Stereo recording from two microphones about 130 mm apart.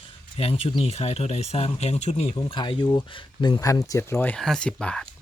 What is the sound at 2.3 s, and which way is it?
Speech, 35° left (ahead or behind).